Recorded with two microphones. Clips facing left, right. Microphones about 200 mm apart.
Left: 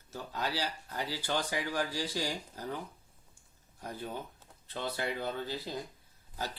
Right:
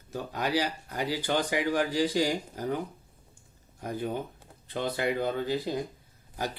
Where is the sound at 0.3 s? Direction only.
15° right (ahead or behind).